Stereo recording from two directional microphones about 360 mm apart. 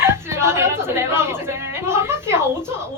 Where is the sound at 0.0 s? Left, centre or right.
Centre.